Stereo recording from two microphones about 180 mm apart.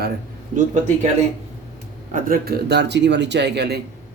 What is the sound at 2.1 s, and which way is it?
A man's voice, 50° right (ahead or behind).